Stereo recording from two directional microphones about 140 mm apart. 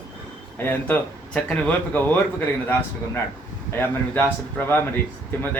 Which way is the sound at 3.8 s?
15° left (ahead or behind).